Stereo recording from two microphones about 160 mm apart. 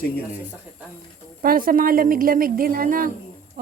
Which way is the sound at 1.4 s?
65° right (ahead or behind).